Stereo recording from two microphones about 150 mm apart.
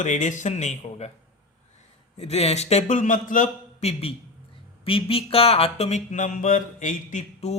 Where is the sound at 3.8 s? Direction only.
40° left (ahead or behind).